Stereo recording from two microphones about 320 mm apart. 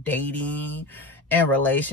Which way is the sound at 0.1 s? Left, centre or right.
Centre.